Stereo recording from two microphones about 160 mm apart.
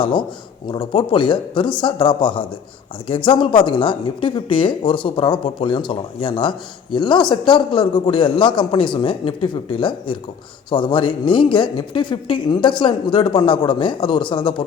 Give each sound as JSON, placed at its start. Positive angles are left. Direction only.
{"t": 0.0, "sound": "speech", "side_deg": 30}